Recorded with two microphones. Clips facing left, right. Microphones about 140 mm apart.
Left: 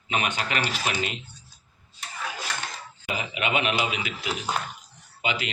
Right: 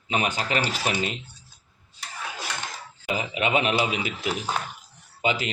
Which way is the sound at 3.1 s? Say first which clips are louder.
Right 3 dB; 35° right (ahead or behind).